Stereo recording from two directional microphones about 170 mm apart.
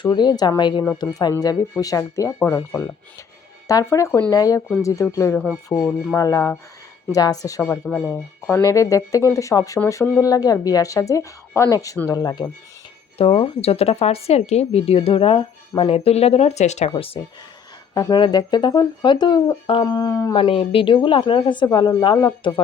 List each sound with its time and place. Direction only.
0.0 s speech: 25° left (ahead or behind)
7.9 s speech: 5° left (ahead or behind)
8.6 s speech: 20° left (ahead or behind)
13.1 s speech: 35° left (ahead or behind)
17.9 s speech: 20° left (ahead or behind)
20.3 s speech: 30° left (ahead or behind)